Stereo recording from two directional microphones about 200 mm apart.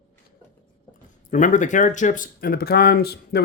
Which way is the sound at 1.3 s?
40° left (ahead or behind).